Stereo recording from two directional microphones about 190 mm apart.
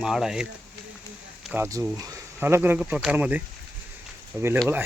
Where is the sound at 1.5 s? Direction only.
10° right (ahead or behind).